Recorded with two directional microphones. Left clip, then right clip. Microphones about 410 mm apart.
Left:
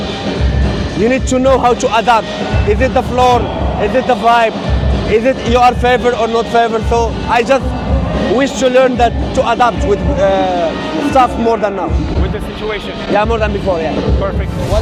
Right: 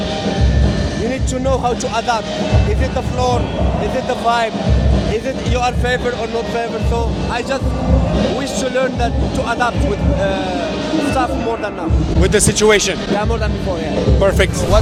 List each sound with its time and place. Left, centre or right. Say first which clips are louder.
1.1 s speech: left 9 dB; left
6.6 s speech: left 8 dB; left
12.3 s speech: right 8 dB; right